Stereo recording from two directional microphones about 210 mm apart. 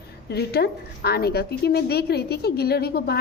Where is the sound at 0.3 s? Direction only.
50° left (ahead or behind).